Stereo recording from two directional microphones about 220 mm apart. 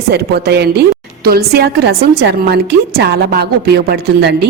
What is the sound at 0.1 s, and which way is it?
Speech, 45° right (ahead or behind).